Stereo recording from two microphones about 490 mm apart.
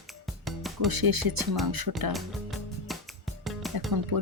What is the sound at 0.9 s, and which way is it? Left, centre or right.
Music, right.